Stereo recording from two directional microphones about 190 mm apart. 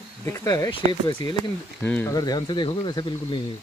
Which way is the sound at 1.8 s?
10° left (ahead or behind).